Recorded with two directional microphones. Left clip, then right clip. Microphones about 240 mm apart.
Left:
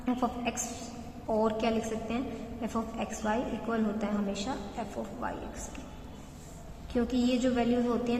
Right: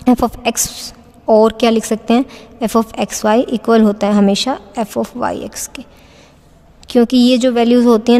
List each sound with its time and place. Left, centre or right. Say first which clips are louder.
0.0 s a woman's voice: right 17 dB; right
6.8 s a woman's voice: right 19 dB; right